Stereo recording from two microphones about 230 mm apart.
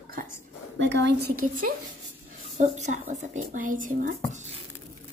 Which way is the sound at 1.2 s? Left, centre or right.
Right.